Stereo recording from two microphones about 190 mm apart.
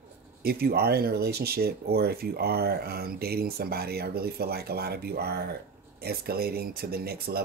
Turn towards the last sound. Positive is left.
turn(degrees=-55)  # may be behind; listen again after turning